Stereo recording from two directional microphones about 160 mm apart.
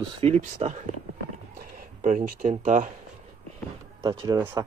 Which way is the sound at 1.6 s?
60° right (ahead or behind).